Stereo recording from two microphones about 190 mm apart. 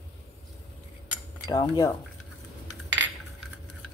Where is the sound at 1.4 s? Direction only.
20° left (ahead or behind).